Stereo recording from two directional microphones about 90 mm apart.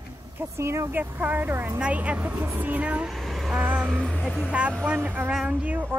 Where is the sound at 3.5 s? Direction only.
15° right (ahead or behind).